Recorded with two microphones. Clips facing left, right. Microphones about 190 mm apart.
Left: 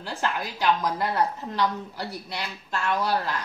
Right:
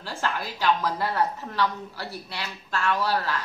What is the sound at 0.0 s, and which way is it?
A woman's voice, 15° left (ahead or behind).